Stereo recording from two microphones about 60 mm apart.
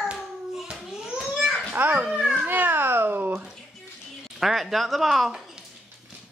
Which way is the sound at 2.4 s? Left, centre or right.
Right.